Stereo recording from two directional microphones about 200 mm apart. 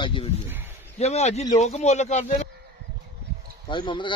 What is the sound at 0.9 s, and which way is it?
Speech, 35° left (ahead or behind).